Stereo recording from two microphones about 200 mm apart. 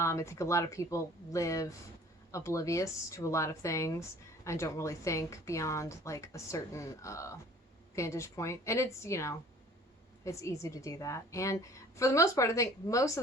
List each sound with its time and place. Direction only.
0.0 s speech: 15° left (ahead or behind)